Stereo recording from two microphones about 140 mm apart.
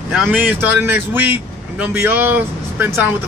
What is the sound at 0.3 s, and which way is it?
A man's voice, 15° right (ahead or behind).